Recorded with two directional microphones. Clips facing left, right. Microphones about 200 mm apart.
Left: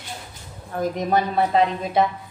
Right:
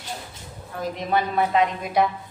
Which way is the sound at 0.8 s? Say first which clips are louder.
Left 3 dB; 40° left (ahead or behind).